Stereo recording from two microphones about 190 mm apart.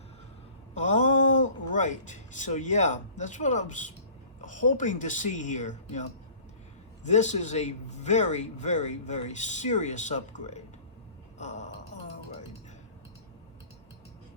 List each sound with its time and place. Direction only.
0.7 s a man's voice: 40° left (ahead or behind)
11.3 s gasp: 40° left (ahead or behind)